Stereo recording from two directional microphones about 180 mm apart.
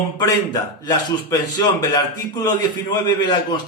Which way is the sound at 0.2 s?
20° left (ahead or behind).